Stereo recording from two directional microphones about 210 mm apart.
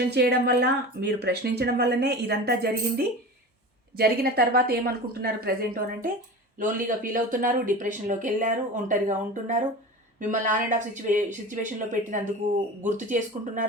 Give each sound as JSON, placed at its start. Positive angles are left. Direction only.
{"t": 0.0, "sound": "speech", "side_deg": -50}